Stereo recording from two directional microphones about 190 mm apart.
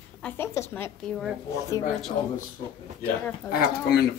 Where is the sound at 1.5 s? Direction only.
15° left (ahead or behind).